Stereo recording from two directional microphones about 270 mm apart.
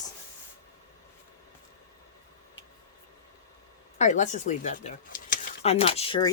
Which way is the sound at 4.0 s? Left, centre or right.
Left.